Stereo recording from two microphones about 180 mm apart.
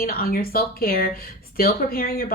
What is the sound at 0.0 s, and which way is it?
A woman's voice, 55° left (ahead or behind).